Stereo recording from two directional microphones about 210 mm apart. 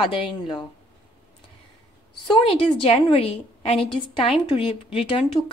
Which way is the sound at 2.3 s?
25° left (ahead or behind).